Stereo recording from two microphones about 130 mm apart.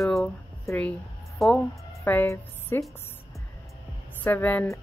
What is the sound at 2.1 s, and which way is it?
Speech, 15° left (ahead or behind).